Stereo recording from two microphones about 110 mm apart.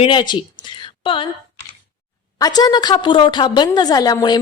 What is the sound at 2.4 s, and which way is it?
A woman's voice, 35° left (ahead or behind).